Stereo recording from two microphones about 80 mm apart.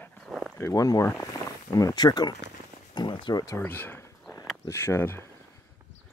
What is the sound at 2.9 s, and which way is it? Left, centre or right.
Speech, left.